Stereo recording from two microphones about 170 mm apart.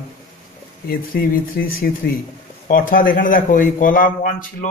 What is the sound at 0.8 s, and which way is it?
Speech, 60° left (ahead or behind).